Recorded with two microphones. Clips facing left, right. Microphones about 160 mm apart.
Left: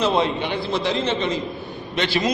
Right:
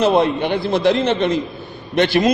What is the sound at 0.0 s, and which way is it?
A man's voice, 55° right (ahead or behind).